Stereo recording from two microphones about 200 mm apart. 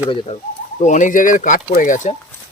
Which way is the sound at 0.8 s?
40° left (ahead or behind).